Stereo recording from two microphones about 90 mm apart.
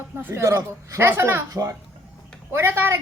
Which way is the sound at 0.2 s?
25° right (ahead or behind).